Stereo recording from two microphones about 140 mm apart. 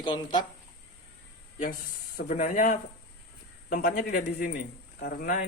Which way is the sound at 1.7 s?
85° left.